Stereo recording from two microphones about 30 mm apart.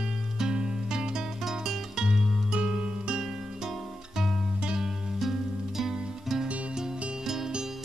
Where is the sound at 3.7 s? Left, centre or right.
Centre.